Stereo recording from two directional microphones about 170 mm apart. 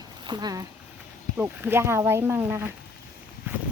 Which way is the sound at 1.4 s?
10° right (ahead or behind).